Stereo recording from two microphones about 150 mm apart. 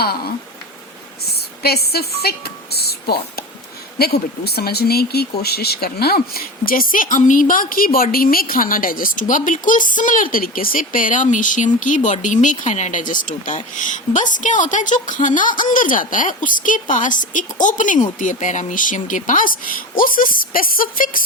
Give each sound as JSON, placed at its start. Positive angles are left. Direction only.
{"t": 1.3, "sound": "speech", "side_deg": 90}